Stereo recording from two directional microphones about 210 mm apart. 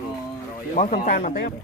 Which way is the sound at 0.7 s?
40° left (ahead or behind).